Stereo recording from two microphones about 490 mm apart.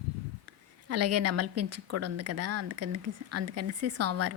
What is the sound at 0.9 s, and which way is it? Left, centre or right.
A woman's voice, right.